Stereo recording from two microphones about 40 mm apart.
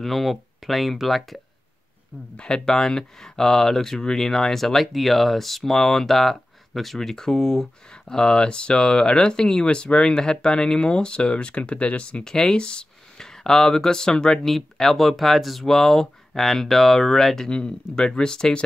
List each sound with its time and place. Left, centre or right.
0.0 s speech: centre
2.3 s speech: left
12.3 s speech: centre
14.5 s speech: centre
17.5 s speech: left